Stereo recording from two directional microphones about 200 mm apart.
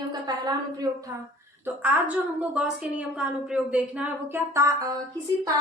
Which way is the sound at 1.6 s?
5° right (ahead or behind).